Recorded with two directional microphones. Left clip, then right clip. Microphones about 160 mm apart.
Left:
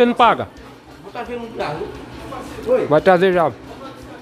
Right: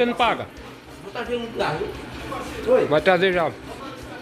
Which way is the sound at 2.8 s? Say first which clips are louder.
Left 5 dB; 40° left (ahead or behind).